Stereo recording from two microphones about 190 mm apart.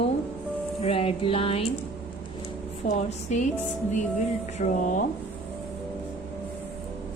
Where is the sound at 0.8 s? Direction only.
30° left (ahead or behind).